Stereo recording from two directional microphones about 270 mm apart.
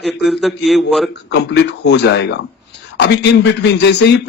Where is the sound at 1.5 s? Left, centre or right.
Left.